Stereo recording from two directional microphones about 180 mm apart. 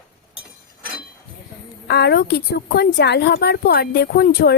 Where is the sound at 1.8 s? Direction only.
65° left (ahead or behind).